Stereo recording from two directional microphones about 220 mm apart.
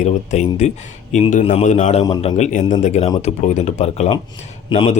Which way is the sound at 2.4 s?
35° left (ahead or behind).